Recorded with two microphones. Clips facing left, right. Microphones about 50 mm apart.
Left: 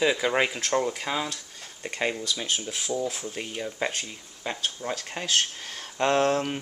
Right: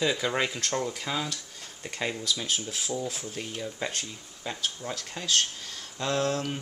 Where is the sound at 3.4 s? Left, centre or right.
Centre.